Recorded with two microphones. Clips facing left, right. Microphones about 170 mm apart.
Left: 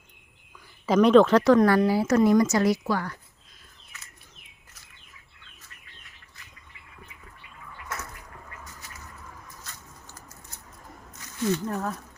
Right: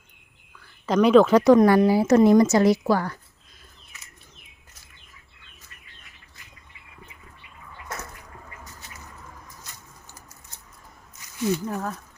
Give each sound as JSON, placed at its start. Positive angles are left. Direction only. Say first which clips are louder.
{"t": 0.9, "sound": "speech", "louder": "right 1 dB", "side_deg": 0}
{"t": 2.8, "sound": "a woman's voice", "louder": "right 5 dB", "side_deg": -35}
{"t": 11.3, "sound": "speech", "louder": "right 1 dB", "side_deg": -10}